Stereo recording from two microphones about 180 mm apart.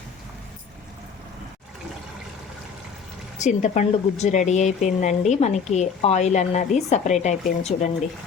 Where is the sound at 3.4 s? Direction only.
40° left (ahead or behind).